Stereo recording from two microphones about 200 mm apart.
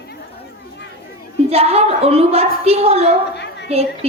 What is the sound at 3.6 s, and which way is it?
Speech, 30° right (ahead or behind).